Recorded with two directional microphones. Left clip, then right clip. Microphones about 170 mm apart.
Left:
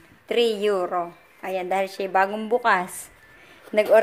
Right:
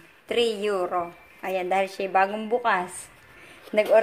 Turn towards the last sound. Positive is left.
turn(degrees=15)  # may be behind; listen again after turning